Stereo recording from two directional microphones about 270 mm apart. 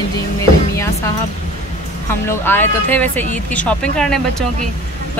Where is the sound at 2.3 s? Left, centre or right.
Centre.